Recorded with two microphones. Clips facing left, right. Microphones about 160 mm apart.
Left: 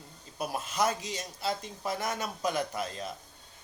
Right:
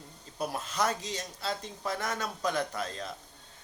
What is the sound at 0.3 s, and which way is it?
Speech, 15° left (ahead or behind).